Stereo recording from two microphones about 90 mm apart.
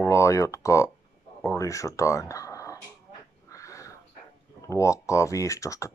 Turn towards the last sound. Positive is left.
turn(degrees=35)  # may be behind; listen again after turning